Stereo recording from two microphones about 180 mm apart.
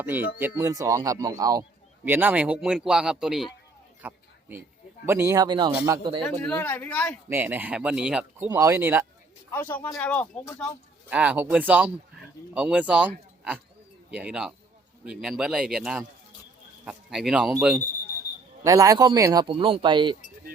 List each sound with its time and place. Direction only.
0.0 s speech: 10° right (ahead or behind)
4.0 s a sound: 10° right (ahead or behind)
5.0 s a man's voice: 15° right (ahead or behind)
6.4 s speech: 10° left (ahead or behind)
7.3 s speech: 10° right (ahead or behind)
8.4 s speech: 15° right (ahead or behind)
9.5 s speech: 10° left (ahead or behind)
11.1 s a man's voice: 10° right (ahead or behind)
18.6 s a man's voice: 20° right (ahead or behind)